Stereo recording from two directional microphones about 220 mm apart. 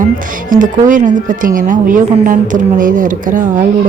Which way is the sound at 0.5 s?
35° right (ahead or behind).